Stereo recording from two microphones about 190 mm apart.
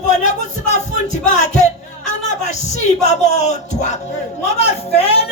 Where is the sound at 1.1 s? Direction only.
40° left (ahead or behind).